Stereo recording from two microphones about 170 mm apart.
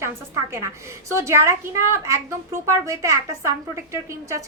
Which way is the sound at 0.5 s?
15° right (ahead or behind).